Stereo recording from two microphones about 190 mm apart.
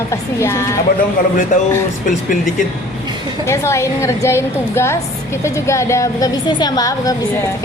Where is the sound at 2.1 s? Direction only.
45° left (ahead or behind).